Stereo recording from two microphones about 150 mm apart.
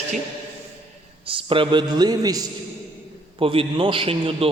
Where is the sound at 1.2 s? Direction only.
35° right (ahead or behind).